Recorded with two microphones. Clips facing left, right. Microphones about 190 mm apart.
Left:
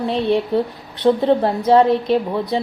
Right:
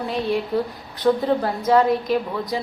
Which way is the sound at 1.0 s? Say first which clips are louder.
Left 4 dB; 30° left (ahead or behind).